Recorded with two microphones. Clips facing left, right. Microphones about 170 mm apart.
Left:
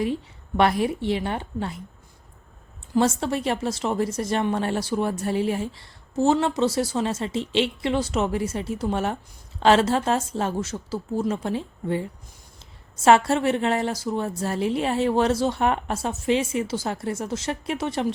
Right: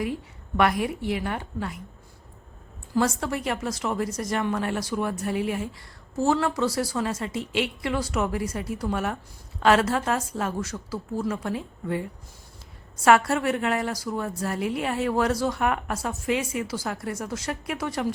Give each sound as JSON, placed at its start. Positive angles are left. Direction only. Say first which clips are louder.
{"t": 0.0, "sound": "speech", "louder": "left 4 dB", "side_deg": 25}
{"t": 2.9, "sound": "speech", "louder": "left 3 dB", "side_deg": 25}